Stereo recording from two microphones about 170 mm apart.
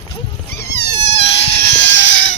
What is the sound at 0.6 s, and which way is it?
Mosquito, 75° left (ahead or behind).